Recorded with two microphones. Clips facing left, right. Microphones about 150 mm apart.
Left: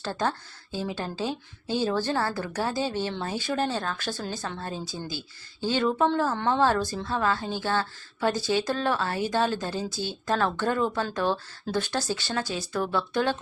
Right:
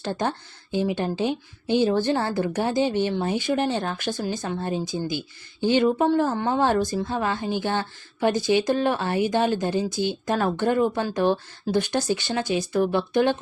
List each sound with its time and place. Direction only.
0.0 s speech: 20° right (ahead or behind)